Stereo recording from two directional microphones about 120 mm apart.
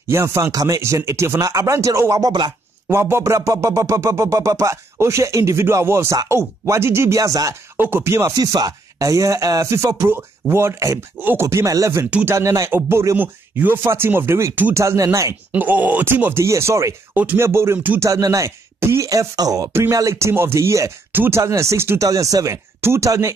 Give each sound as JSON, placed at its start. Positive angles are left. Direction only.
{"t": 0.1, "sound": "speech", "side_deg": -25}
{"t": 2.9, "sound": "speech", "side_deg": -20}
{"t": 7.7, "sound": "speech", "side_deg": -20}
{"t": 12.1, "sound": "speech", "side_deg": -10}
{"t": 12.4, "sound": "speech", "side_deg": -25}
{"t": 15.5, "sound": "speech", "side_deg": -15}